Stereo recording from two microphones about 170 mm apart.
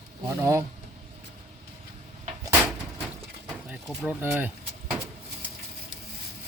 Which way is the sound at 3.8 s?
5° right (ahead or behind).